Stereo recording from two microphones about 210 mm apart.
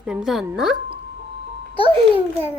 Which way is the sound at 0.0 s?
5° right (ahead or behind).